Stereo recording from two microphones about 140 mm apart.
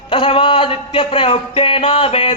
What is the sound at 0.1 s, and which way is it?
Mantra, 40° left (ahead or behind).